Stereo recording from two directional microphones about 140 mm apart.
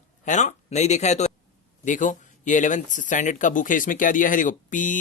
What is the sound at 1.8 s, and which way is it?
Speech, 65° left (ahead or behind).